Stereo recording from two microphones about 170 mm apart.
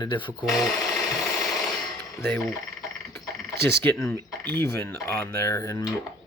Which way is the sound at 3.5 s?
75° right (ahead or behind).